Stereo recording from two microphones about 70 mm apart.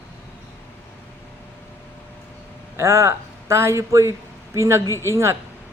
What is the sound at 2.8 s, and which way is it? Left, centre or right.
Speech, right.